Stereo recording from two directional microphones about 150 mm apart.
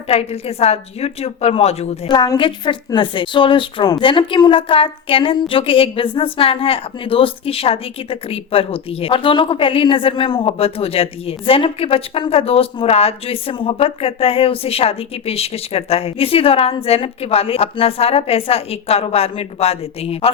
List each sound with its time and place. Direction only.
0.1 s a woman's voice: 45° left (ahead or behind)
2.0 s a woman's voice: 30° left (ahead or behind)